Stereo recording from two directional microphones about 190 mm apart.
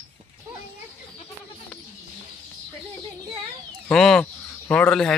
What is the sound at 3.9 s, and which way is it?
Speech, 5° left (ahead or behind).